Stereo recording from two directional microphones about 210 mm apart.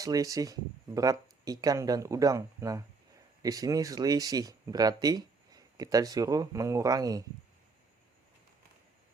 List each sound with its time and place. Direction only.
0.0 s speech: 15° right (ahead or behind)